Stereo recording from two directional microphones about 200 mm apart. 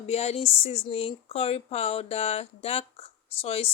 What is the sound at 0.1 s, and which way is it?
A woman's voice, 30° left (ahead or behind).